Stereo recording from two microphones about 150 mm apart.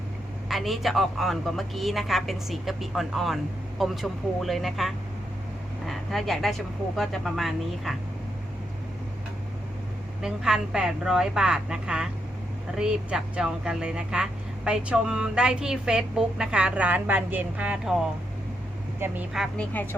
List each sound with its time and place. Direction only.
0.4 s speech: centre (ahead or behind)
10.2 s speech: 5° right (ahead or behind)
19.3 s speech: centre (ahead or behind)
19.7 s a woman's voice: 10° left (ahead or behind)